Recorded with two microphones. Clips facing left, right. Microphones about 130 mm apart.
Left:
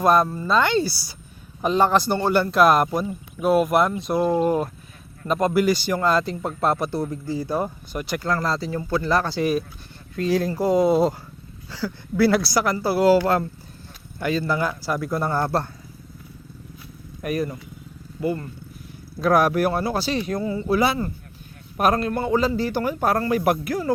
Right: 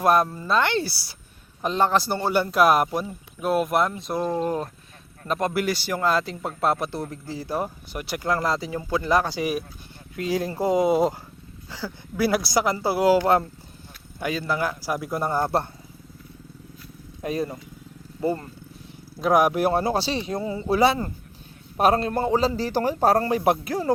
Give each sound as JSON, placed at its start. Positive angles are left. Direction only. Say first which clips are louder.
{"t": 0.0, "sound": "speech", "louder": "left 2 dB", "side_deg": -5}
{"t": 5.5, "sound": "speech", "louder": "left 5 dB", "side_deg": 0}
{"t": 8.2, "sound": "speech", "louder": "right 1 dB", "side_deg": -20}
{"t": 17.2, "sound": "speech", "louder": "left 2 dB", "side_deg": -25}
{"t": 19.2, "sound": "speech", "louder": "left 1 dB", "side_deg": -15}
{"t": 19.7, "sound": "a man's voice", "louder": "even", "side_deg": -30}